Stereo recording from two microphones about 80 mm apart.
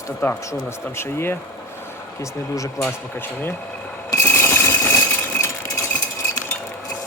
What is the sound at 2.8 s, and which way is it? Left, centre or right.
Speech, left.